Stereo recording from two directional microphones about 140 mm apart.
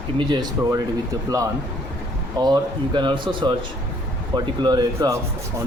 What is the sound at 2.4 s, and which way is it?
Speech, 30° right (ahead or behind).